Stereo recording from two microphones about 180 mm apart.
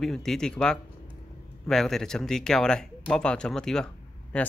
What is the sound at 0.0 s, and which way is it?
Speech, centre (ahead or behind).